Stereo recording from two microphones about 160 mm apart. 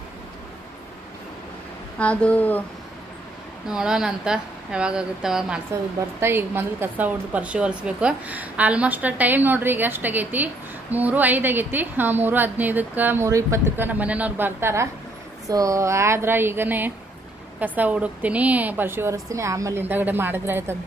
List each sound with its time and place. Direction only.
2.0 s speech: 10° left (ahead or behind)
3.6 s a woman's voice: 5° right (ahead or behind)